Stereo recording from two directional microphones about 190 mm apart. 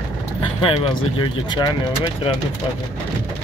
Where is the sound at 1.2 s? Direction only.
25° left (ahead or behind).